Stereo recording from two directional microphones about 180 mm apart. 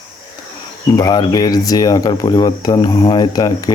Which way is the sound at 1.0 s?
25° left (ahead or behind).